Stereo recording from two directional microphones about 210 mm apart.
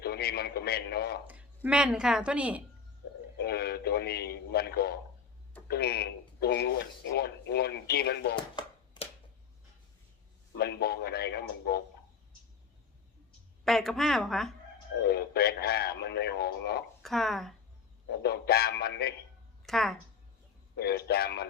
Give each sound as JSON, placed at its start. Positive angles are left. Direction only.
{"t": 0.0, "sound": "a man's voice", "side_deg": 50}
{"t": 1.3, "sound": "a woman's voice", "side_deg": -5}
{"t": 3.4, "sound": "speech", "side_deg": 50}
{"t": 8.6, "sound": "hands", "side_deg": 20}
{"t": 10.6, "sound": "speech", "side_deg": 50}
{"t": 13.7, "sound": "a woman's voice", "side_deg": 0}
{"t": 15.0, "sound": "speech", "side_deg": 50}
{"t": 17.0, "sound": "speech", "side_deg": 0}
{"t": 18.1, "sound": "speech", "side_deg": 50}
{"t": 19.6, "sound": "speech", "side_deg": 0}
{"t": 20.7, "sound": "speech", "side_deg": 50}